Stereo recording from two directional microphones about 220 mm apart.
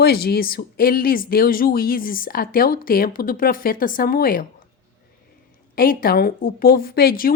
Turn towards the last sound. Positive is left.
turn(degrees=40)  # may be behind; listen again after turning